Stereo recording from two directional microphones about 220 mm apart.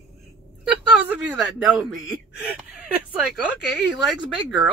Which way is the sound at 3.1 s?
Centre (ahead or behind).